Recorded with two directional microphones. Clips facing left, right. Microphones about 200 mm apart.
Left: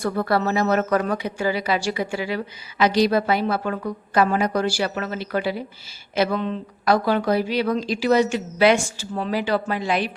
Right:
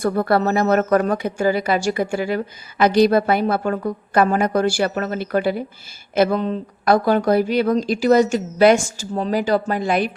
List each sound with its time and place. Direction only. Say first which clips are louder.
0.0 s speech: right 4 dB; 50° right (ahead or behind)